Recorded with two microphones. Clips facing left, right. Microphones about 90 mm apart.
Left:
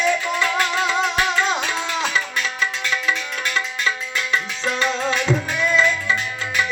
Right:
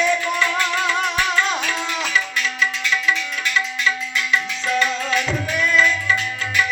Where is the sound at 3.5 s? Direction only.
35° left (ahead or behind).